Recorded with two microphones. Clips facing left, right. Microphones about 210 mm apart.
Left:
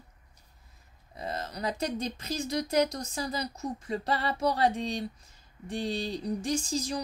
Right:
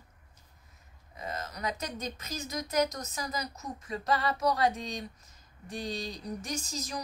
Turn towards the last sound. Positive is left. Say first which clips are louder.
# left 6 dB
turn(degrees=30)  # may be behind; listen again after turning